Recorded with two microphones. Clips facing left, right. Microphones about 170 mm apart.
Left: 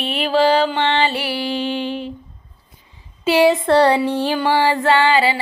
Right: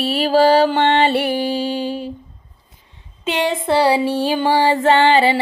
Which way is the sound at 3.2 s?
5° left (ahead or behind).